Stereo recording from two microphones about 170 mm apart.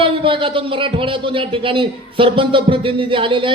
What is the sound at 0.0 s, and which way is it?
Speech, 30° right (ahead or behind).